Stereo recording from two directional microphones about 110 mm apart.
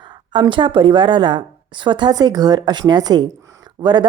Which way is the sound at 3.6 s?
40° right (ahead or behind).